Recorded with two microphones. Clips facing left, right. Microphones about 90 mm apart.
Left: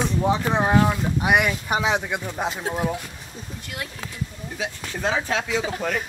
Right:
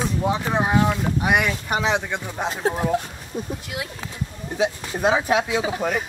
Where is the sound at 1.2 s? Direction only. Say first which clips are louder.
Left 2 dB; 10° left (ahead or behind).